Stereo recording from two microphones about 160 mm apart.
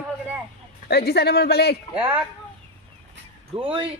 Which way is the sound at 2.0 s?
10° right (ahead or behind).